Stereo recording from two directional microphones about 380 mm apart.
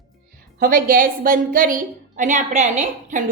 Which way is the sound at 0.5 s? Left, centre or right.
Right.